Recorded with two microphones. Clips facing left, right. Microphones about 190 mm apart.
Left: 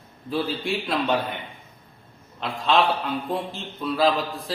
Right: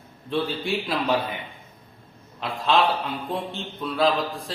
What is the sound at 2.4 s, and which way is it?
Speech, centre (ahead or behind).